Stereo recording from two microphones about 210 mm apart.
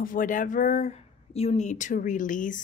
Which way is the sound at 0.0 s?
40° left (ahead or behind).